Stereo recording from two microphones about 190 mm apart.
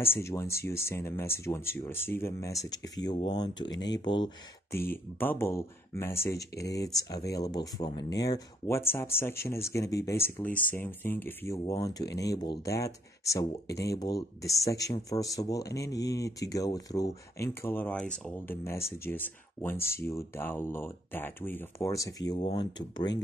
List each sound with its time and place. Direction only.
0.0 s speech: 15° left (ahead or behind)
4.7 s speech: 10° left (ahead or behind)